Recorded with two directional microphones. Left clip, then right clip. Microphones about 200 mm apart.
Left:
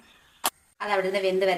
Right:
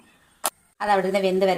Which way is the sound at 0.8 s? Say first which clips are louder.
Right 4 dB; 25° right (ahead or behind).